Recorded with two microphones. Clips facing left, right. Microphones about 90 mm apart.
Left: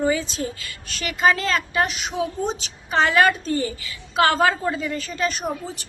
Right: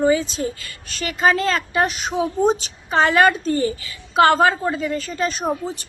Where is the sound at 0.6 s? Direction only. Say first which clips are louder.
Right 2 dB; 40° right (ahead or behind).